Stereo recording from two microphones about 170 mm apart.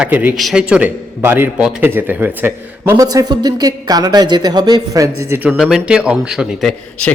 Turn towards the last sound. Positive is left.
turn(degrees=0)  # may be behind; listen again after turning